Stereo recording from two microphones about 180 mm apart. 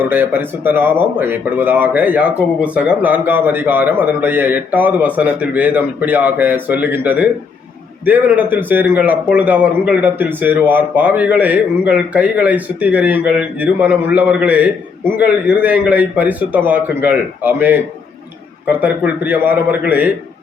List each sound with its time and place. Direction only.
0.0 s a man's voice: 10° right (ahead or behind)